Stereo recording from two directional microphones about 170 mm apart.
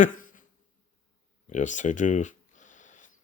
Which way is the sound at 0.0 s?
50° left (ahead or behind).